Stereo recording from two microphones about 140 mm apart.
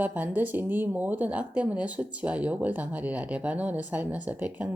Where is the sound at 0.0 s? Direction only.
10° right (ahead or behind).